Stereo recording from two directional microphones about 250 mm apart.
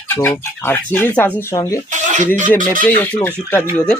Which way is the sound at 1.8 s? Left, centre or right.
Right.